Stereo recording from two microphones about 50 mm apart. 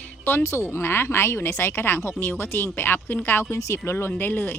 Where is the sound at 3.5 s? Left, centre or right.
Left.